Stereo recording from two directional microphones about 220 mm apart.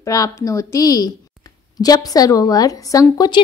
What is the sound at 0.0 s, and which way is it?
A woman's voice, 15° left (ahead or behind).